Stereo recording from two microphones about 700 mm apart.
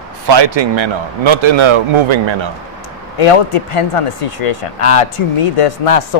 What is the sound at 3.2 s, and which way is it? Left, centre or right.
Speech, left.